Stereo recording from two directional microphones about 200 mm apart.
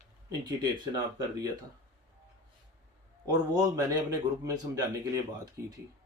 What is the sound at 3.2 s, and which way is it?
A man's voice, 20° right (ahead or behind).